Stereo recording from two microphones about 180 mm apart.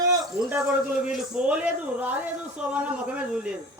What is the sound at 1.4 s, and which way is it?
Speech, 5° right (ahead or behind).